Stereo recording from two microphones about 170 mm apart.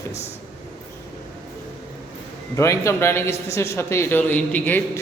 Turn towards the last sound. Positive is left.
turn(degrees=10)  # may be behind; listen again after turning